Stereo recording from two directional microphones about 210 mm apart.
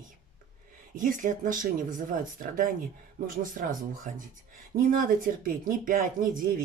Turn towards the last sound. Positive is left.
turn(degrees=-40)  # may be behind; listen again after turning